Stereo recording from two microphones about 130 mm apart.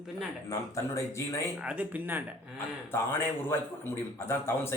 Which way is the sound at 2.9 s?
15° left (ahead or behind).